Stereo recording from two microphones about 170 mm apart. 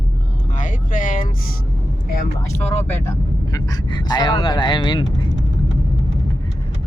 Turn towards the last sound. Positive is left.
turn(degrees=30)  # may be behind; listen again after turning